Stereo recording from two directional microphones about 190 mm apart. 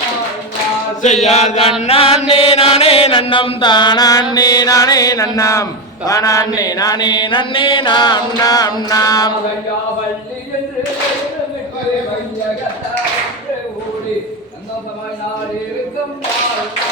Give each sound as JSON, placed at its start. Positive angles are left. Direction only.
{"t": 1.0, "sound": "mantra", "side_deg": 40}
{"t": 1.8, "sound": "chant", "side_deg": 30}
{"t": 6.1, "sound": "music", "side_deg": 15}
{"t": 6.6, "sound": "chant", "side_deg": 20}